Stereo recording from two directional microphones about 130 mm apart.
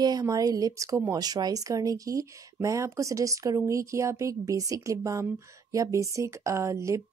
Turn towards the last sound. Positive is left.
turn(degrees=-20)  # may be behind; listen again after turning